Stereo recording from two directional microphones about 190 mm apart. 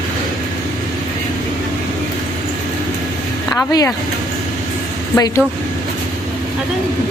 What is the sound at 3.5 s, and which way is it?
Speech, 15° left (ahead or behind).